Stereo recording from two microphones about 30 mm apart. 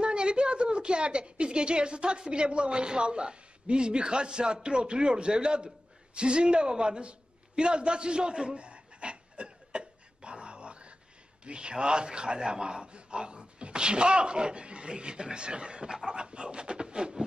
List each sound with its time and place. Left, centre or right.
0.0 s a woman's voice: right
8.5 s a sound: right
11.4 s a man's voice: right